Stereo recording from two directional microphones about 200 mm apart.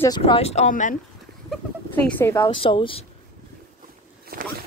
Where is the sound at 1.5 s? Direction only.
10° left (ahead or behind).